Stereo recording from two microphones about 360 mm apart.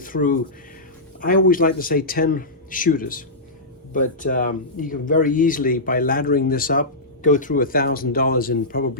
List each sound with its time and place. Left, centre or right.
0.0 s speech: left